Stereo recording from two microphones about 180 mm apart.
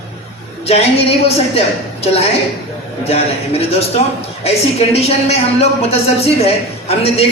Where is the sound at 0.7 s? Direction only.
35° left (ahead or behind).